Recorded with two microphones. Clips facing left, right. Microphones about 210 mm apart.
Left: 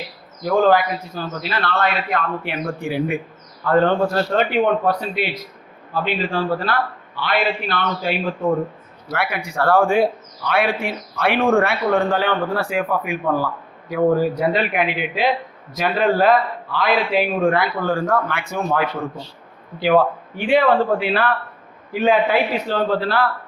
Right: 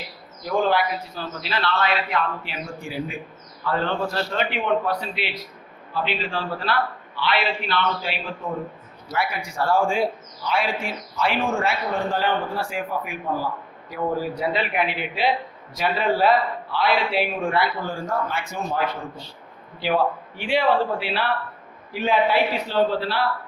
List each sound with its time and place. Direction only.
0.4 s a man's voice: 45° left (ahead or behind); by 3.2 s 60° left (ahead or behind)
3.7 s a man's voice: 50° left (ahead or behind)
9.1 s a man's voice: 60° left (ahead or behind)
19.8 s a man's voice: 50° left (ahead or behind)